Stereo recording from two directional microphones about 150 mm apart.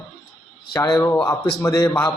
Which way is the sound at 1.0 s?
15° left (ahead or behind).